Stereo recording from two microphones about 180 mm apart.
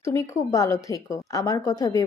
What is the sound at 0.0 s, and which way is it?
Speech, 15° left (ahead or behind).